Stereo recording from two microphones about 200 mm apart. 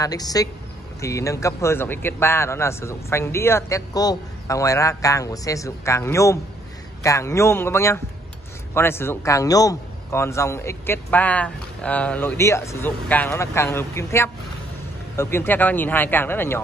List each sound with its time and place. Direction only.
0.0 s a woman's voice: 20° left (ahead or behind)